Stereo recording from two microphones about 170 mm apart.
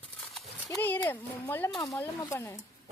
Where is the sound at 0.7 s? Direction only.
10° left (ahead or behind).